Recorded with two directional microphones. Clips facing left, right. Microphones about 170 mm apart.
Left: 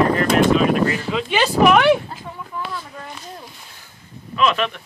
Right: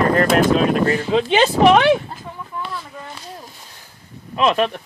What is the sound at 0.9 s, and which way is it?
Speech, 30° right (ahead or behind).